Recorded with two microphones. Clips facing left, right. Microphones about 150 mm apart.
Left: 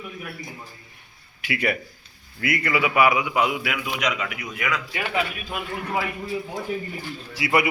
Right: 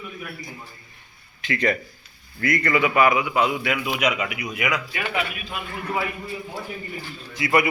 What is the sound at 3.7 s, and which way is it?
Speech, 5° right (ahead or behind).